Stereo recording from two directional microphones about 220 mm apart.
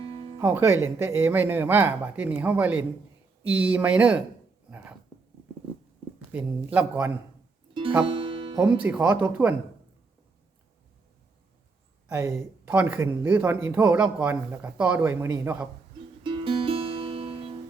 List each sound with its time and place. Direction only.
0.4 s speech: 10° right (ahead or behind)
6.3 s speech: 5° right (ahead or behind)
7.7 s music: 25° right (ahead or behind)
8.8 s speech: 5° right (ahead or behind)
12.0 s speech: 10° right (ahead or behind)
16.2 s music: 25° right (ahead or behind)